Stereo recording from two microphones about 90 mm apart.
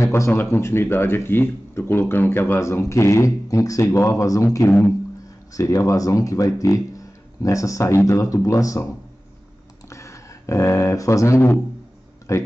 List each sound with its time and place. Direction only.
0.0 s speech: 30° left (ahead or behind)
4.6 s speech: 20° left (ahead or behind)
5.5 s speech: 40° left (ahead or behind)
9.8 s speech: 35° left (ahead or behind)